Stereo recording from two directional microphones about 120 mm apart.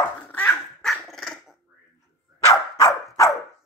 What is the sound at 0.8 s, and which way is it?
Dog, centre (ahead or behind).